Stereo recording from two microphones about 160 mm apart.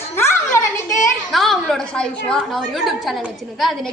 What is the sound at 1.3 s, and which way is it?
A woman's voice, centre (ahead or behind).